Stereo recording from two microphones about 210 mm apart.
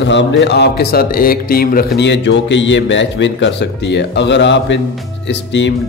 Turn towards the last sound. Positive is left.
turn(degrees=60)  # may be behind; listen again after turning